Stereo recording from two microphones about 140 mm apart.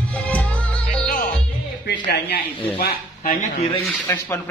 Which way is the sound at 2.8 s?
90° left.